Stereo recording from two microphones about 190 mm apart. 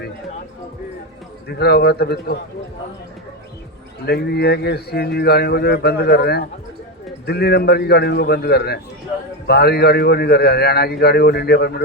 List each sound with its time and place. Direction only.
1.5 s speech: 60° left (ahead or behind)
4.0 s speech: 60° left (ahead or behind)